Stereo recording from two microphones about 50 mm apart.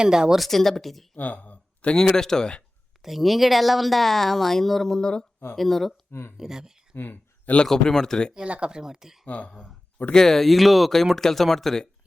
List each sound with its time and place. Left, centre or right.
0.0 s speech: centre
0.3 s speech: centre
1.1 s a sound: left
2.0 s speech: centre
3.0 s speech: centre
6.1 s speech: left
6.3 s speech: centre
6.9 s a sound: left
7.7 s speech: centre
8.4 s speech: right
9.2 s speech: left
10.1 s speech: centre